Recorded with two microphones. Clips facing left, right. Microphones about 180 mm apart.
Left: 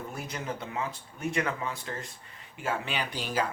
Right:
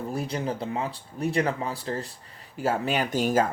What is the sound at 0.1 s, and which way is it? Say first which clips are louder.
Speech: right 7 dB; 30° right (ahead or behind).